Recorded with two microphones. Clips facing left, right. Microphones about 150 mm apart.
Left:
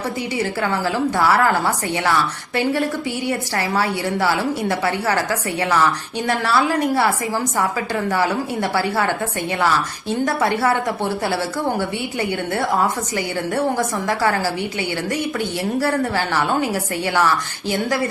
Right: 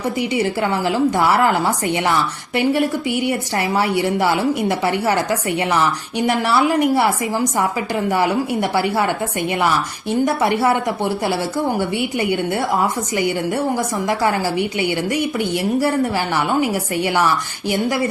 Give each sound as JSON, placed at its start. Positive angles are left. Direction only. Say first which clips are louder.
{"t": 0.2, "sound": "a woman's voice", "louder": "right 4 dB", "side_deg": -20}